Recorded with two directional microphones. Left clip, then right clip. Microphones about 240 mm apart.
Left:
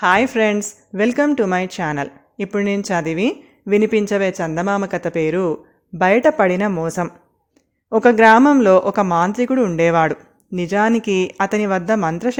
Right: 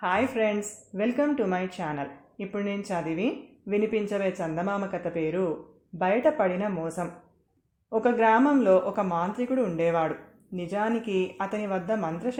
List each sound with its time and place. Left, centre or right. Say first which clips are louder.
0.0 s speech: left 10 dB; left